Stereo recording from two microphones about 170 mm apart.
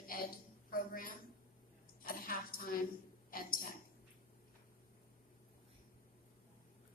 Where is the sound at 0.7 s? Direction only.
55° left (ahead or behind).